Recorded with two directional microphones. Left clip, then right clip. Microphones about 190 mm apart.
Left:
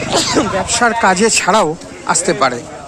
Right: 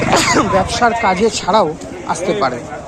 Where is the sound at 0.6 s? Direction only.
40° left (ahead or behind).